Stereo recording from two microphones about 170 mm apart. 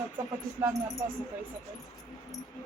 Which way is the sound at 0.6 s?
20° right (ahead or behind).